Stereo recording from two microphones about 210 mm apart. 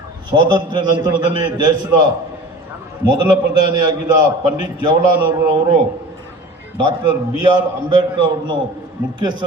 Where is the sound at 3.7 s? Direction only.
20° right (ahead or behind).